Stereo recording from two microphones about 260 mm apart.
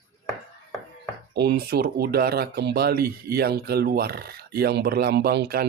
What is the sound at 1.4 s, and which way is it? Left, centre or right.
Speech, right.